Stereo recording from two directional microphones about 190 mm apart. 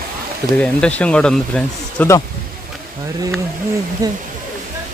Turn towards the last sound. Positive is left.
turn(degrees=-20)  # may be behind; listen again after turning